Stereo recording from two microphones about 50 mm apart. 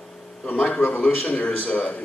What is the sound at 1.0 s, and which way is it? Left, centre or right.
A man's voice, left.